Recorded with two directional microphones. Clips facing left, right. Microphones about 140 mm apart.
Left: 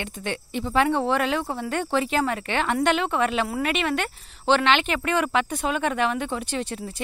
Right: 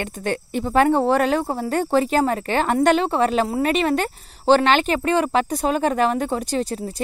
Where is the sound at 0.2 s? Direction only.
45° right (ahead or behind).